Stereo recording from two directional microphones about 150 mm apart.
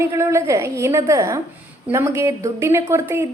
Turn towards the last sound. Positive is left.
turn(degrees=-20)  # may be behind; listen again after turning